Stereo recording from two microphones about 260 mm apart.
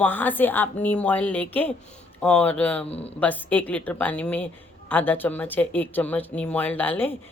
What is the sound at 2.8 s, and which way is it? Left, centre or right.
Speech, left.